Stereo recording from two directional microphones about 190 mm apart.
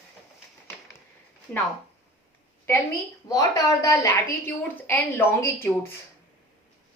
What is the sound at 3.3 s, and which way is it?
A woman's voice, 20° left (ahead or behind).